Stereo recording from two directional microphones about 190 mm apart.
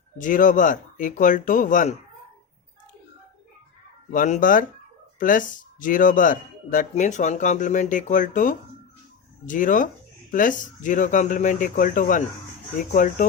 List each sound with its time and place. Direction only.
0.2 s speech: 45° left (ahead or behind)
4.1 s speech: 45° left (ahead or behind)